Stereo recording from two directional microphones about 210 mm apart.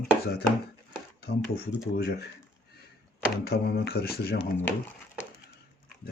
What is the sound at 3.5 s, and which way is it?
Speech, 50° left (ahead or behind).